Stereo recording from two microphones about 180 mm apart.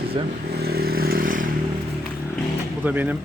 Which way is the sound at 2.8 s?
10° right (ahead or behind).